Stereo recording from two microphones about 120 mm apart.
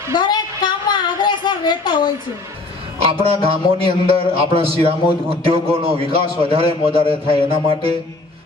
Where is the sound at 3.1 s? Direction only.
55° right (ahead or behind).